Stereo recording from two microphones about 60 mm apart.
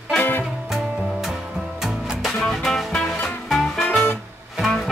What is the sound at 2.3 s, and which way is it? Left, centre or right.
Music, centre.